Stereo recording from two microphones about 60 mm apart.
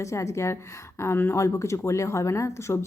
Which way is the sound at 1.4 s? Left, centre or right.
Left.